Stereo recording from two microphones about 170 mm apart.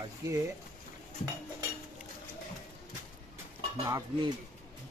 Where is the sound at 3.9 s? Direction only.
20° right (ahead or behind).